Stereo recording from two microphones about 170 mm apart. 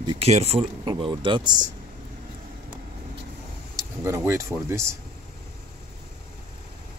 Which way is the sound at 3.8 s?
15° right (ahead or behind).